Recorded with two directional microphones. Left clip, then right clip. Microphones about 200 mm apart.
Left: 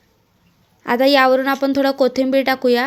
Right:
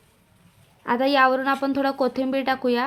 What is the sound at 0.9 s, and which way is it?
A woman's voice, 15° left (ahead or behind).